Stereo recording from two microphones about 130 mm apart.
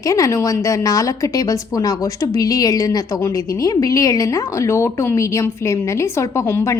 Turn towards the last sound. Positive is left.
turn(degrees=20)  # may be behind; listen again after turning